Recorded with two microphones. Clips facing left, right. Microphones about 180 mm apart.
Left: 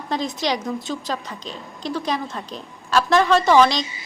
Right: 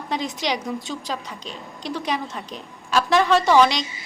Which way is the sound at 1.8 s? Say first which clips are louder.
Left 2 dB; 40° left (ahead or behind).